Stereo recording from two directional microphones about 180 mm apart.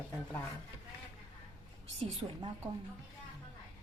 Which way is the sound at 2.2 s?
30° right (ahead or behind).